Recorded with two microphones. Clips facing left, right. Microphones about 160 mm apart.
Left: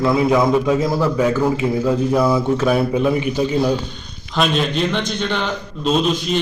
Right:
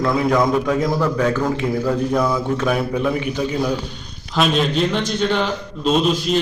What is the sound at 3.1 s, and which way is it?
Speech, 25° left (ahead or behind).